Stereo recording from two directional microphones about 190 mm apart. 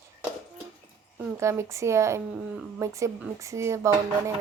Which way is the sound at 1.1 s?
10° right (ahead or behind).